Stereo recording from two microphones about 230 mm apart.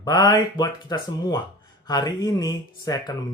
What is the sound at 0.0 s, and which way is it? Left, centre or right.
Speech, centre.